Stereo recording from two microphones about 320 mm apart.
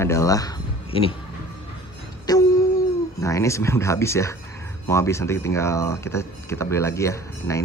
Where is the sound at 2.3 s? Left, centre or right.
Centre.